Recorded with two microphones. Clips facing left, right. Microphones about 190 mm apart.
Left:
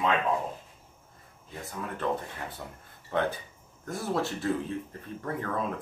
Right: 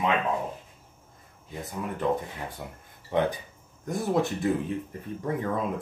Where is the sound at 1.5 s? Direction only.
15° right (ahead or behind).